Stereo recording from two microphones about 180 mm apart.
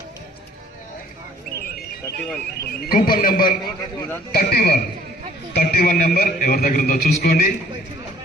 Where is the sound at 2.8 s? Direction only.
55° left (ahead or behind).